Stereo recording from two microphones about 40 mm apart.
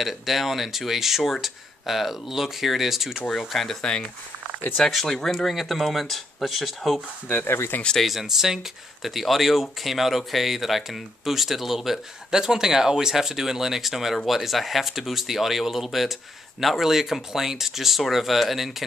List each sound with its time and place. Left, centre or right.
0.0 s speech: centre
4.9 s speech: centre
7.4 s speech: left
8.0 s speech: centre